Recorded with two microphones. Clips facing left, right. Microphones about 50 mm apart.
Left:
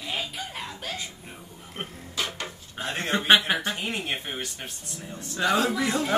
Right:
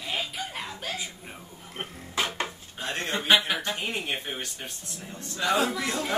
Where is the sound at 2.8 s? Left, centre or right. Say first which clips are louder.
Left 3 dB; centre.